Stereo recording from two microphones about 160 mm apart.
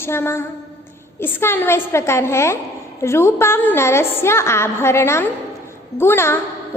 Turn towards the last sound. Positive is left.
turn(degrees=15)  # may be behind; listen again after turning